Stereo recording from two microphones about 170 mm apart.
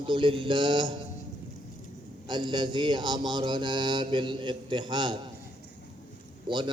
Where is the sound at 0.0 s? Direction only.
30° right (ahead or behind).